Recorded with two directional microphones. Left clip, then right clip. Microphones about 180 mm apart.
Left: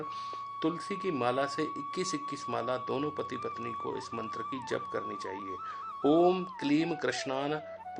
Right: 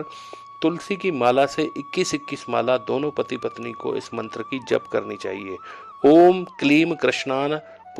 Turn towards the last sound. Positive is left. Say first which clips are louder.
# right 10 dB
turn(degrees=-45)  # may be behind; listen again after turning